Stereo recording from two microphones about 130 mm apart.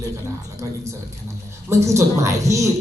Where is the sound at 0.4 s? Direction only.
25° right (ahead or behind).